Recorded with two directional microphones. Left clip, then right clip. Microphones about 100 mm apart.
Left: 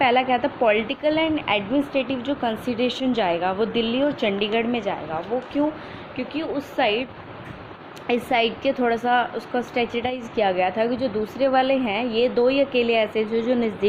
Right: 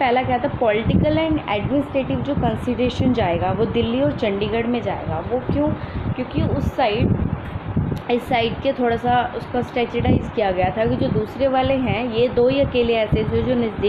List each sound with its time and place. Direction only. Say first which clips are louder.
0.0 s a woman's voice: right 1 dB; 50° left (ahead or behind)
6.1 s a woman's voice: right 2 dB; 45° left (ahead or behind)